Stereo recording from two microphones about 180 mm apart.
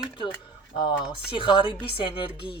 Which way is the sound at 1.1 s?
30° left (ahead or behind).